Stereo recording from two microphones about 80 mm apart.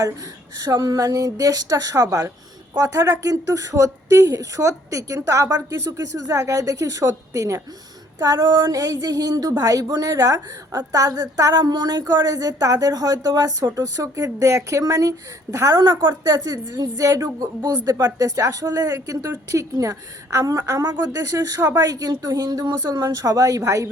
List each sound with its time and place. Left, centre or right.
0.5 s a woman's voice: right
8.4 s a sound: right
8.7 s a woman's voice: right
21.8 s a woman's voice: right